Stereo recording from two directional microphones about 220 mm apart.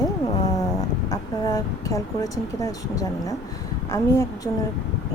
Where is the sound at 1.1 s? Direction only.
15° left (ahead or behind).